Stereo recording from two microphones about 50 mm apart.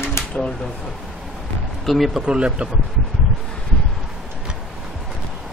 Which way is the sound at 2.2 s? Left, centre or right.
Centre.